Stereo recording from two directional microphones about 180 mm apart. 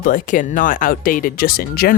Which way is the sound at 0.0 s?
45° left (ahead or behind).